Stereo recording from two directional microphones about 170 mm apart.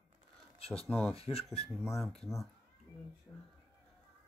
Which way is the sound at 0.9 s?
10° left (ahead or behind).